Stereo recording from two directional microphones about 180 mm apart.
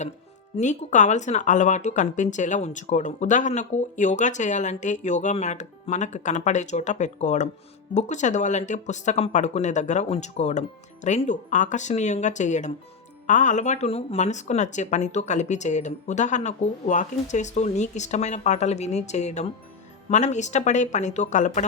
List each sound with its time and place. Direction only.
0.5 s speech: 40° left (ahead or behind)